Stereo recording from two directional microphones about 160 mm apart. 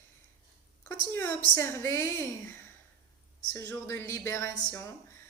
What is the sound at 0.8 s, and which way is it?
A woman's voice, 10° left (ahead or behind).